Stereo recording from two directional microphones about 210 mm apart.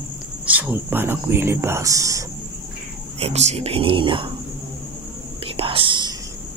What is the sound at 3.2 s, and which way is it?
Speech, 30° right (ahead or behind).